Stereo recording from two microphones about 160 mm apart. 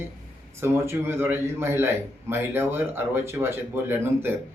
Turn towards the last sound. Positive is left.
turn(degrees=-15)  # may be behind; listen again after turning